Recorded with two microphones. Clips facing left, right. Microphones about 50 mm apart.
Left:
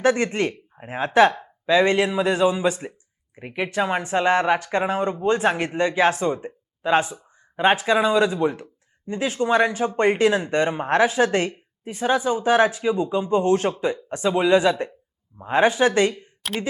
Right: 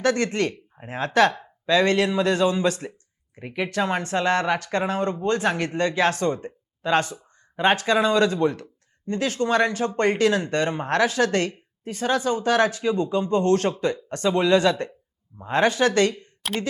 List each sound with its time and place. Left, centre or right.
0.0 s speech: centre